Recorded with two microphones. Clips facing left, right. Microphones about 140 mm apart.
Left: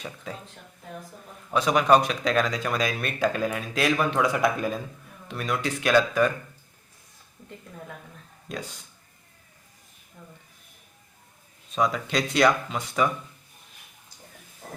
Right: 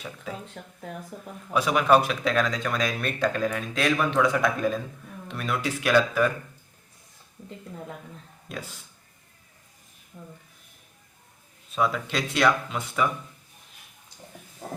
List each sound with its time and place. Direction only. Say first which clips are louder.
0.6 s speech: right 6 dB; 65° right (ahead or behind)
1.5 s speech: left 1 dB; 5° right (ahead or behind)
8.4 s speech: left 2 dB; 5° right (ahead or behind)
11.7 s speech: left 1 dB; centre (ahead or behind)